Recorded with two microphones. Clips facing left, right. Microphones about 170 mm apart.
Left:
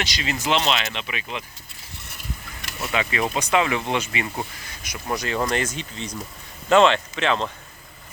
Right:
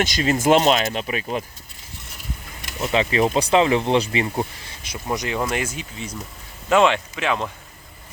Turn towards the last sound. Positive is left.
turn(degrees=-10)  # may be behind; listen again after turning